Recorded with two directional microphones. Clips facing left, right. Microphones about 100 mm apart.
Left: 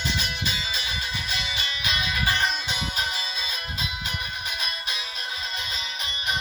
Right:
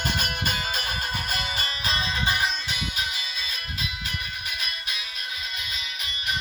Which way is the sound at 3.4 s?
25° left (ahead or behind).